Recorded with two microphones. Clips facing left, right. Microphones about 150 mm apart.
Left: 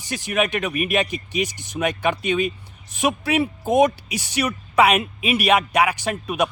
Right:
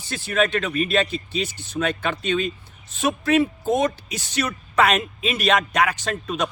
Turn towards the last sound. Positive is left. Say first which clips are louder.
# left 3 dB
turn(degrees=10)  # may be behind; listen again after turning